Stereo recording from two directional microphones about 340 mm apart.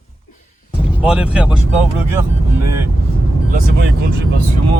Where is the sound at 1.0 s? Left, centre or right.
Centre.